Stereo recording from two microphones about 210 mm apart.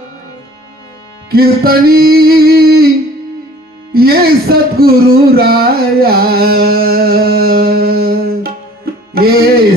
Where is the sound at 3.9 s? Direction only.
45° right (ahead or behind).